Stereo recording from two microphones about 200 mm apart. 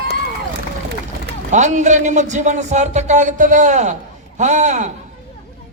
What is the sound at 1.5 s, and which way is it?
A man's voice, 40° right (ahead or behind).